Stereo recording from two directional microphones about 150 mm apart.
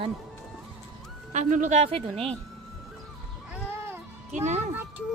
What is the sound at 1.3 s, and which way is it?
A woman's voice, 55° right (ahead or behind).